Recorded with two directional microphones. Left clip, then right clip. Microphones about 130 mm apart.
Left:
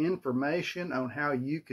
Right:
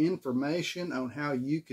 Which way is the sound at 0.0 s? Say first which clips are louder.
Even; 20° right (ahead or behind).